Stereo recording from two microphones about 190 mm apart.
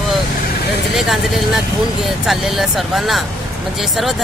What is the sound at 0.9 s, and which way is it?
Speech, centre (ahead or behind).